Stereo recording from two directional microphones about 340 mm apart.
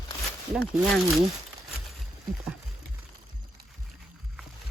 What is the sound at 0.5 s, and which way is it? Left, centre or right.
Speech, centre.